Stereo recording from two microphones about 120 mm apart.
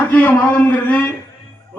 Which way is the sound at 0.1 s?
15° left (ahead or behind).